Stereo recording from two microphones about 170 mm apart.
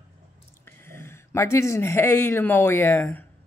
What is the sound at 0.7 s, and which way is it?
Speech, 15° left (ahead or behind).